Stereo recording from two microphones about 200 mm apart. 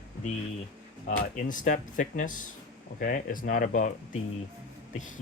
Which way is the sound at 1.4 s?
40° left (ahead or behind).